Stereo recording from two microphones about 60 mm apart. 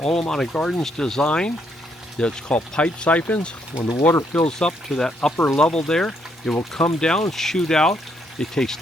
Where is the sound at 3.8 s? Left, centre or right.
Left.